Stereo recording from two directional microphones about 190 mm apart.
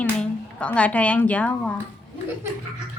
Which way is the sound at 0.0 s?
5° left (ahead or behind).